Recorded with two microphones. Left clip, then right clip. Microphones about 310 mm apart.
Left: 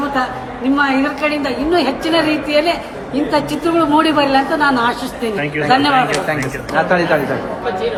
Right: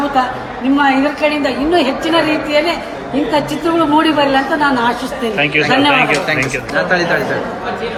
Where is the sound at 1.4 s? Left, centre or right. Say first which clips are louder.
Right 2 dB; centre.